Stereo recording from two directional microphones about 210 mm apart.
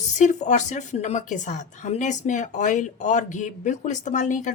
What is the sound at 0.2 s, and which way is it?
A woman's voice, 35° left (ahead or behind).